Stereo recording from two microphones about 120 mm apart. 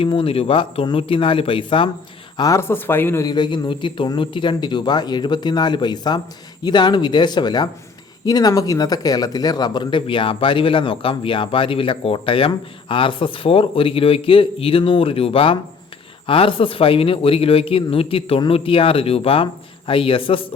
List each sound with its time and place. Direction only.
0.0 s speech: 50° left (ahead or behind)
2.4 s speech: 25° left (ahead or behind)
3.2 s speech: 40° left (ahead or behind)